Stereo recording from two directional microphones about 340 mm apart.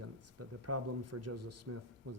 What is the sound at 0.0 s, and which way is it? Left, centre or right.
Speech, right.